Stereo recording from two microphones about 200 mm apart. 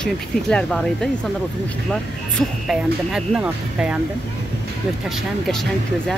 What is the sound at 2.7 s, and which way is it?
Speech, 5° right (ahead or behind).